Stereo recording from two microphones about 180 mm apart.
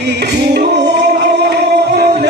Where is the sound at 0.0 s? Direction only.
70° right (ahead or behind).